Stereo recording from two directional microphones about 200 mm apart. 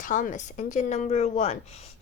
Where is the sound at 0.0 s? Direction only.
40° left (ahead or behind).